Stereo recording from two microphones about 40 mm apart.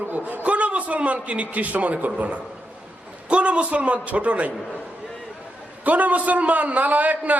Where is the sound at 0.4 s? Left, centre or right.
Right.